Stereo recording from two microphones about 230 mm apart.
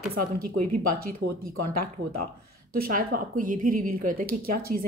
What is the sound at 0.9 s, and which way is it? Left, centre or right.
Speech, right.